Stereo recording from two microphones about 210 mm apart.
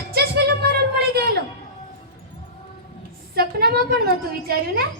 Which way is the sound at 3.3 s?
45° right (ahead or behind).